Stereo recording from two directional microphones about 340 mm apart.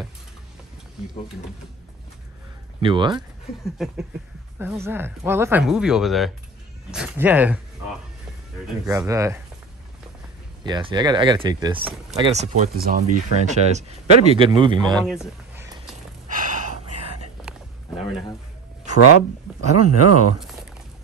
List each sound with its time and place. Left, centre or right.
2.8 s speech: centre
3.6 s speech: centre
8.8 s speech: centre
10.6 s speech: centre
12.2 s speech: centre
15.0 s speech: centre
18.9 s speech: left